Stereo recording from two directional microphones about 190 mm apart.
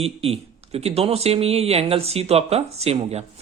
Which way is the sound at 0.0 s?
30° right (ahead or behind).